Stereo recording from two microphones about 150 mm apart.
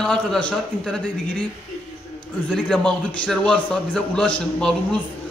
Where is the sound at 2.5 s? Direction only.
Centre (ahead or behind).